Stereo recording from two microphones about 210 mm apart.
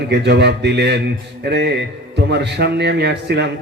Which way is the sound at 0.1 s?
55° right (ahead or behind).